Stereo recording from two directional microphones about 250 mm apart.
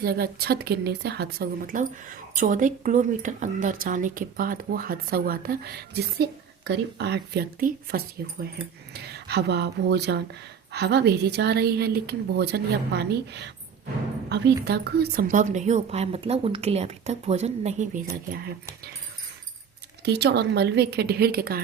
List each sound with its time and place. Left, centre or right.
0.0 s a woman's voice: right
9.0 s a woman's voice: right
20.1 s a woman's voice: right